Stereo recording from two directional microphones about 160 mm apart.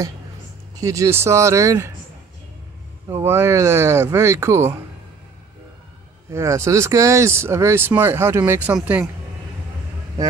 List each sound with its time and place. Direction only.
0.7 s speech: 20° right (ahead or behind)
3.1 s speech: 15° right (ahead or behind)
6.3 s speech: 15° right (ahead or behind)